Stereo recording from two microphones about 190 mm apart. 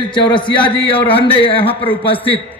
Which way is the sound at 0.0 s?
25° left (ahead or behind).